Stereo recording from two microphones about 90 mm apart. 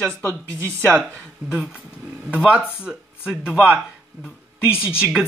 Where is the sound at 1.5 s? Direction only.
15° right (ahead or behind).